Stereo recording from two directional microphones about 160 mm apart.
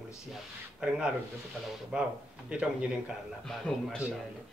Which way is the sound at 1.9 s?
5° right (ahead or behind).